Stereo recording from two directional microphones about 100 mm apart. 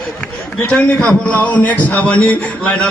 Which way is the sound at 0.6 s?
15° left (ahead or behind).